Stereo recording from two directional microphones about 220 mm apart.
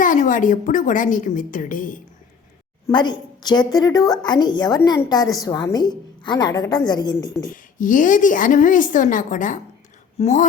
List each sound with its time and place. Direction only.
0.0 s a woman's voice: 35° left (ahead or behind)
2.8 s a woman's voice: 20° left (ahead or behind)
7.5 s a woman's voice: 35° left (ahead or behind)